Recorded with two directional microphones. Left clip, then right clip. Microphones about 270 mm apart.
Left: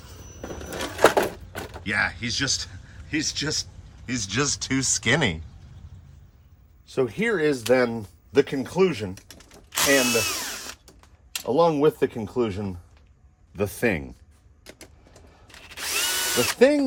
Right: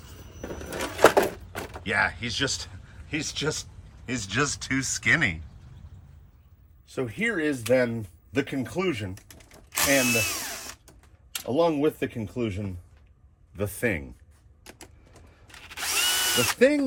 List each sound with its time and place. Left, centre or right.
0.0 s a sound: centre
3.1 s speech: centre
6.8 s speech: left
9.2 s ratchet: centre
10.1 s speech: centre
11.5 s speech: left
14.6 s vehicle: centre
15.4 s drill: centre